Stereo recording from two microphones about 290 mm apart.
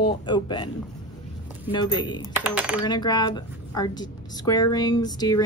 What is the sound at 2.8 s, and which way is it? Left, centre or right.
Speech, centre.